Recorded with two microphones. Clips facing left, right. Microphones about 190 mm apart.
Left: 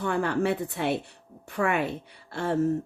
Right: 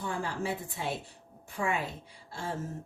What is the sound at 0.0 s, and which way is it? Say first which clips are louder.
A woman's voice: left 8 dB; 65° left (ahead or behind).